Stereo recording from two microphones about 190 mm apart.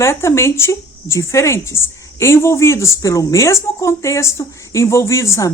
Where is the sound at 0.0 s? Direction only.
15° left (ahead or behind).